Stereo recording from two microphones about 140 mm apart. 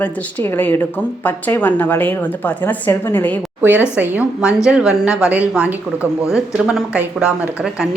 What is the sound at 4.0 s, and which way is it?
A woman's voice, 10° right (ahead or behind).